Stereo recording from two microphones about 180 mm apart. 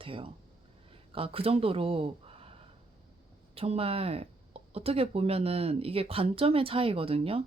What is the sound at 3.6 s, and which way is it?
Speech, 35° right (ahead or behind).